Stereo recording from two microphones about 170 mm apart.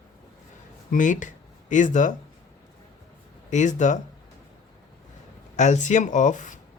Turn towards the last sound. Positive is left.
turn(degrees=45)  # may be behind; listen again after turning